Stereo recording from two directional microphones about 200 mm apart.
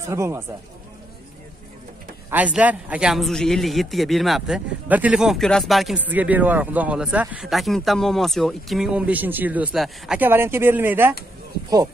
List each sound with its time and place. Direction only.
0.1 s speech: 15° right (ahead or behind)
2.3 s a man's voice: 5° right (ahead or behind)